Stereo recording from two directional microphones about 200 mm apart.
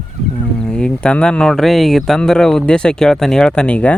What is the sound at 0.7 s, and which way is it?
Speech, 5° left (ahead or behind).